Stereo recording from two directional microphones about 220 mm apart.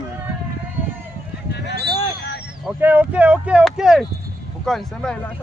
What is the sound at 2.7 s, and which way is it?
Speech, 10° right (ahead or behind).